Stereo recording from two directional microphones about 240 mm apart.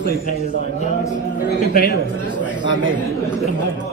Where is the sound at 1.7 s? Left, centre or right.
Left.